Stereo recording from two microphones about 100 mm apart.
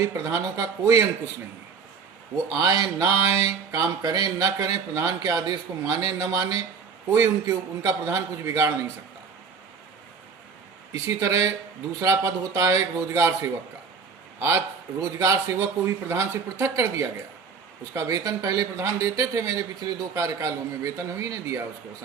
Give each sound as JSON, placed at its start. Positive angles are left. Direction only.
{"t": 0.0, "sound": "a man's voice", "side_deg": -30}
{"t": 2.6, "sound": "a man's voice", "side_deg": -40}
{"t": 4.0, "sound": "a man's voice", "side_deg": -40}
{"t": 10.9, "sound": "a man's voice", "side_deg": -30}